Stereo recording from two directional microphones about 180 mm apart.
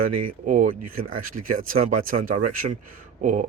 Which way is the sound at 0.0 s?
45° right (ahead or behind).